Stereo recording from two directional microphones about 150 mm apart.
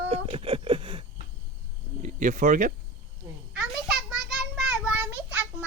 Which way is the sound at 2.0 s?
60° right (ahead or behind).